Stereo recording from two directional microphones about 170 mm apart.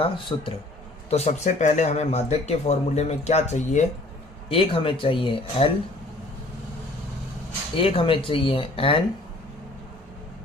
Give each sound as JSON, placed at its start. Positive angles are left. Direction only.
{"t": 0.0, "sound": "speech", "side_deg": 30}
{"t": 1.1, "sound": "speech", "side_deg": 40}
{"t": 7.8, "sound": "speech", "side_deg": 30}